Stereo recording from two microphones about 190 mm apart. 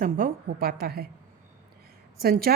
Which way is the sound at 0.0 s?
50° right (ahead or behind).